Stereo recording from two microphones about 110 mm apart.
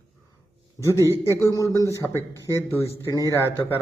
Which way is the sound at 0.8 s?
25° left (ahead or behind).